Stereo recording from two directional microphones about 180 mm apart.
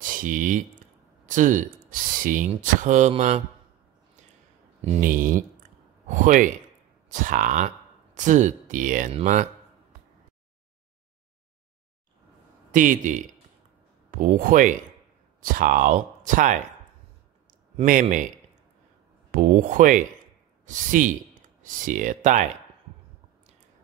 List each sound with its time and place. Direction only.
0.0 s speech: 50° right (ahead or behind)
5.0 s speech: 50° right (ahead or behind)
12.7 s speech: 45° right (ahead or behind)
17.5 s a sound: 45° right (ahead or behind)
19.3 s speech: 50° right (ahead or behind)